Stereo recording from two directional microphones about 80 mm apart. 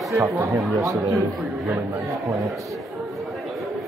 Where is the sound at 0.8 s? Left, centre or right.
Right.